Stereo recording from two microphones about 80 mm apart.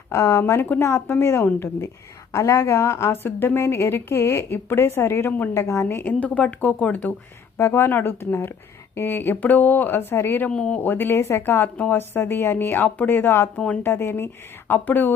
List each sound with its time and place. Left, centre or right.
0.1 s a woman's voice: left
2.3 s a woman's voice: left
10.5 s speech: centre
10.8 s speech: left